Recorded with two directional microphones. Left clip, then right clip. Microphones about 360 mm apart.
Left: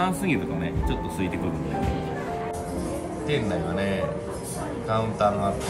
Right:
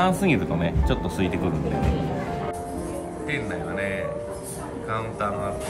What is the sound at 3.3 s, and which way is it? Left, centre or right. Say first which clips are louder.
Speech: left 2 dB; centre.